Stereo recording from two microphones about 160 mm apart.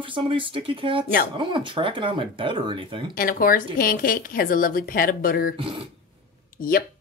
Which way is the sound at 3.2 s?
60° left (ahead or behind).